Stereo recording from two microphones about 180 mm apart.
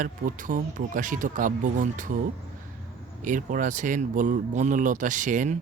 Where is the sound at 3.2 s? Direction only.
45° right (ahead or behind).